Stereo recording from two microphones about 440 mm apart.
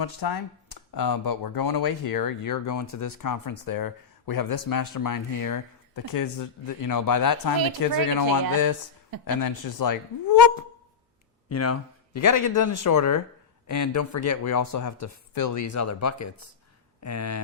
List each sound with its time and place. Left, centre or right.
0.0 s speech: left
9.2 s speech: left
11.4 s speech: left